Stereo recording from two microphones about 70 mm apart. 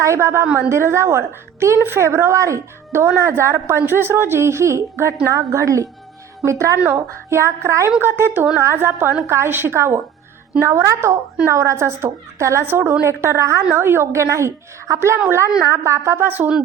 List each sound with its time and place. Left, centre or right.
0.0 s a woman's voice: right